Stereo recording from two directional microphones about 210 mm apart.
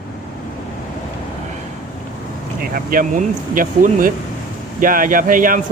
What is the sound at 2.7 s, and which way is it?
Speech, 40° right (ahead or behind).